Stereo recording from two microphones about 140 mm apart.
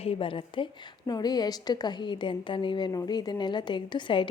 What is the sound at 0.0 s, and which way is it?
A woman's voice, 40° left (ahead or behind).